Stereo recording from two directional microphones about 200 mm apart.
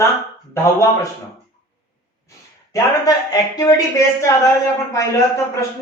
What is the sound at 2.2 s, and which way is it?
Speech, 15° left (ahead or behind).